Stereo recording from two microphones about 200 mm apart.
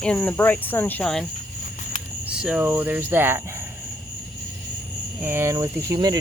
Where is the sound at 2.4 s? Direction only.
5° right (ahead or behind).